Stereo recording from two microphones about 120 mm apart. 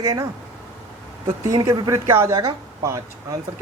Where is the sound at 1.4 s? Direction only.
30° right (ahead or behind).